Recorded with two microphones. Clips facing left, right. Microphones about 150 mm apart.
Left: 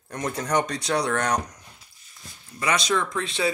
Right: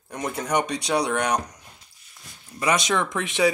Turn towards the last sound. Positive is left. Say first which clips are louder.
# right 4 dB
turn(degrees=-15)  # may be behind; listen again after turning